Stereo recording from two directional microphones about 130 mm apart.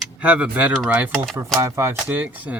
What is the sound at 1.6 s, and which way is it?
Speech, 20° right (ahead or behind).